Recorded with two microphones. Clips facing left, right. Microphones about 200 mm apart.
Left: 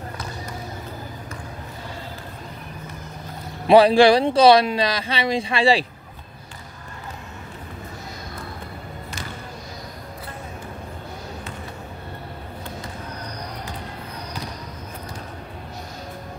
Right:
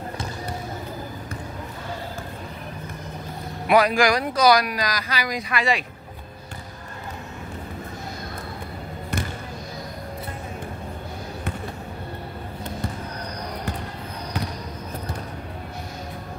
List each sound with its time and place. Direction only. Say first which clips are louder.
3.6 s speech: left 6 dB; 30° left (ahead or behind)